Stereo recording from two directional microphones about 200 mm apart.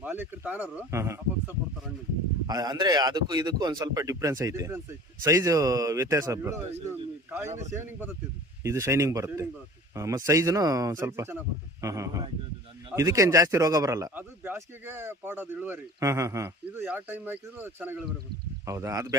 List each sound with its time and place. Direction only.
0.0 s a man's voice: 10° right (ahead or behind)
7.4 s a man's voice: 35° right (ahead or behind)
7.7 s a man's voice: 10° right (ahead or behind)